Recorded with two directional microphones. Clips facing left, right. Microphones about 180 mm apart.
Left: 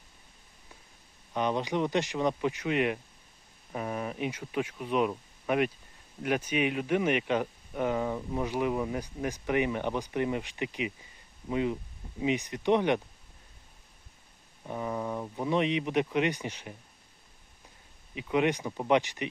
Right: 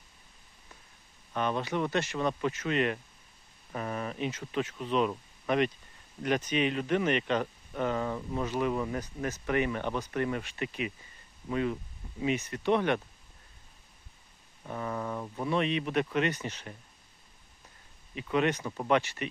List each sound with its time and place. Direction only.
1.3 s speech: 15° left (ahead or behind)
14.6 s speech: 15° left (ahead or behind)
18.1 s speech: 15° left (ahead or behind)